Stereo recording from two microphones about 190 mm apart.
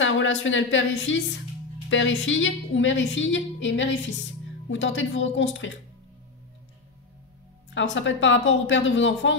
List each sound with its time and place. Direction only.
0.0 s a woman's voice: 85° left
7.7 s a woman's voice: 75° left (ahead or behind)